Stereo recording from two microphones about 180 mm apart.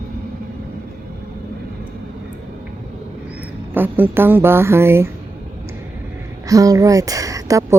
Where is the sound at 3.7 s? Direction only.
10° right (ahead or behind).